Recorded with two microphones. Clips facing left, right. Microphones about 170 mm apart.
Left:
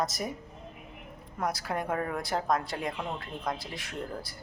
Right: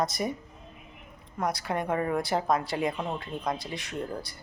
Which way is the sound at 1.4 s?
Centre (ahead or behind).